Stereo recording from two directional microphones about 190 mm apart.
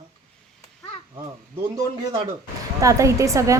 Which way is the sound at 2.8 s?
15° right (ahead or behind).